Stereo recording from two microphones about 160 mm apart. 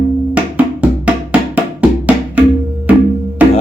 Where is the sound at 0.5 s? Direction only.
10° right (ahead or behind).